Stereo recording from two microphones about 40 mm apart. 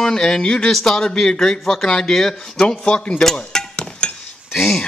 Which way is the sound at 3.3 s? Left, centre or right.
Left.